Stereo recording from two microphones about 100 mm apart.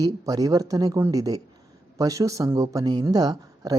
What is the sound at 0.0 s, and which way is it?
Speech, 35° right (ahead or behind).